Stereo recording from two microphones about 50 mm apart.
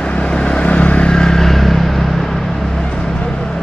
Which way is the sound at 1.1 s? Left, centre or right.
Centre.